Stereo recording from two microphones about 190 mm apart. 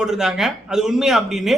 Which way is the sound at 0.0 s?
Centre (ahead or behind).